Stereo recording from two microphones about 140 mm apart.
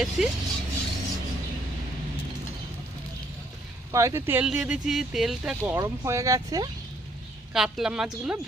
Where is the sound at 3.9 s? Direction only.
20° right (ahead or behind).